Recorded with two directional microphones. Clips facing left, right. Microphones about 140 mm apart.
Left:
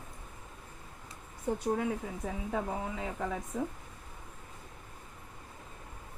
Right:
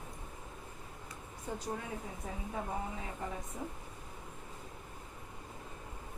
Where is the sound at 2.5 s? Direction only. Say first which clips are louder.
Left 4 dB; 90° left.